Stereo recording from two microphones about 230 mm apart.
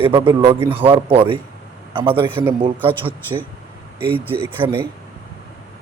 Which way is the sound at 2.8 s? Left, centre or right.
Centre.